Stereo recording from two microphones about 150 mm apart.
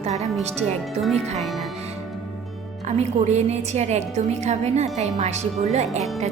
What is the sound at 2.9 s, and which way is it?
A woman's voice, 50° right (ahead or behind).